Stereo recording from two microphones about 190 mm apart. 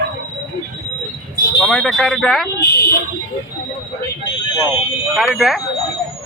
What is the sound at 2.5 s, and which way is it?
Speech, 55° left (ahead or behind).